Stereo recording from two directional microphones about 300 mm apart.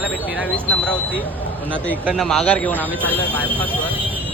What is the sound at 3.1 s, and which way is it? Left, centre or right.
Speech, centre.